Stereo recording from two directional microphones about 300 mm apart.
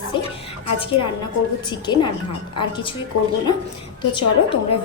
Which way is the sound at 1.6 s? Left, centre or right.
Centre.